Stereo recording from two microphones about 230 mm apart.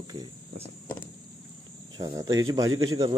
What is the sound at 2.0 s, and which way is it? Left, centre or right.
Speech, centre.